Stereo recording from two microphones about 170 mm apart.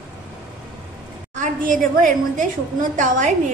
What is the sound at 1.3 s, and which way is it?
A woman's voice, 50° right (ahead or behind).